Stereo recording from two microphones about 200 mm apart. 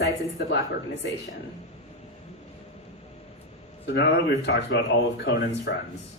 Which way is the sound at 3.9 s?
60° left (ahead or behind).